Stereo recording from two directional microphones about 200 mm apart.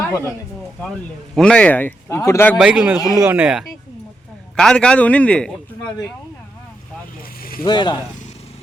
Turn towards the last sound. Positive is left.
turn(degrees=20)  # may be behind; listen again after turning